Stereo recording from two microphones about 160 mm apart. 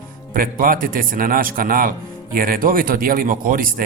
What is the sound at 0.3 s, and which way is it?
Speech, 60° right (ahead or behind).